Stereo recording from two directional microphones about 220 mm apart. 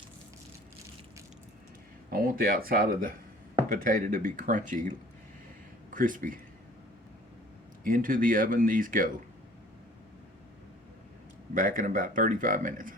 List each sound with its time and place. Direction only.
2.1 s speech: 40° right (ahead or behind)
7.9 s speech: 40° right (ahead or behind)
11.5 s speech: 35° right (ahead or behind)